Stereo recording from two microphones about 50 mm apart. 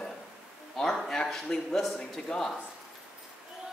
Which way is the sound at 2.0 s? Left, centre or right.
Centre.